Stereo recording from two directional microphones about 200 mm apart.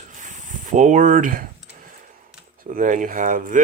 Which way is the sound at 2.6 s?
40° right (ahead or behind).